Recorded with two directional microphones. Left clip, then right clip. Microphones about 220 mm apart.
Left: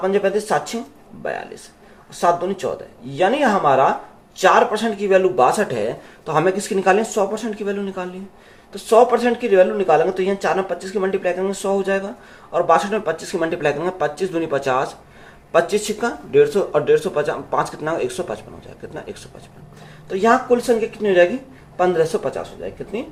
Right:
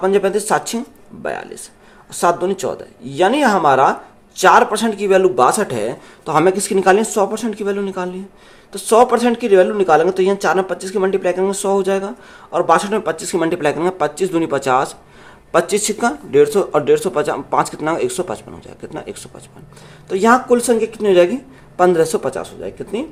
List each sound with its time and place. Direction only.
0.0 s a man's voice: 50° right (ahead or behind)
2.2 s a man's voice: 50° right (ahead or behind)
20.1 s a man's voice: 45° right (ahead or behind)